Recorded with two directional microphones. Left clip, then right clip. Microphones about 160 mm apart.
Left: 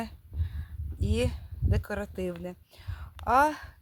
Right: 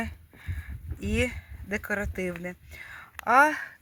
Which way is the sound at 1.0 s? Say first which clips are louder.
Right 2 dB; 25° right (ahead or behind).